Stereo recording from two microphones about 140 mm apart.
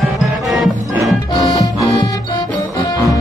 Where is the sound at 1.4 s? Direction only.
25° left (ahead or behind).